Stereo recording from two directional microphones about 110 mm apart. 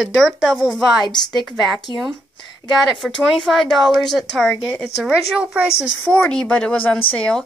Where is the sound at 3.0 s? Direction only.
Centre (ahead or behind).